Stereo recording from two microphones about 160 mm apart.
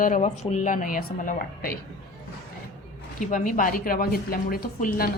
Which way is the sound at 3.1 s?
55° left (ahead or behind).